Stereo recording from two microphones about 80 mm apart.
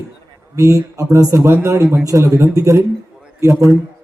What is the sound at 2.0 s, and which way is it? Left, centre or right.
A man's voice, right.